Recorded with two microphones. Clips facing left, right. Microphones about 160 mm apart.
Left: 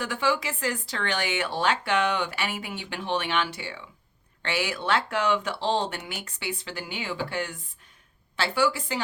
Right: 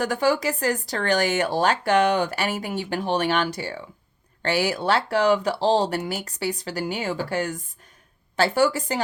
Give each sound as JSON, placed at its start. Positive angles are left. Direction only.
{"t": 0.0, "sound": "speech", "side_deg": -40}